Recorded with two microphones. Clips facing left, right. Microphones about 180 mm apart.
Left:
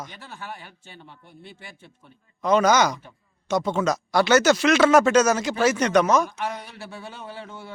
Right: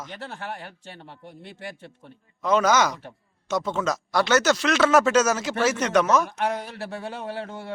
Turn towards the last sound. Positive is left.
turn(degrees=-65)  # may be behind; listen again after turning